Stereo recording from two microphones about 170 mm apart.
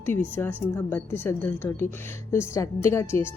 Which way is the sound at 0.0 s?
15° left (ahead or behind).